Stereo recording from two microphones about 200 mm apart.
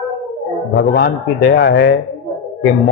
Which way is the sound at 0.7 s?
55° left (ahead or behind).